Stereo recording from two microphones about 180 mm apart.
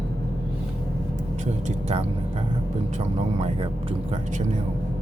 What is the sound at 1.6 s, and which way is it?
Speech, 35° right (ahead or behind).